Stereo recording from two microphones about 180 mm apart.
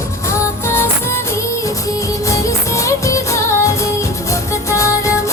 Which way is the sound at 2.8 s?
15° left (ahead or behind).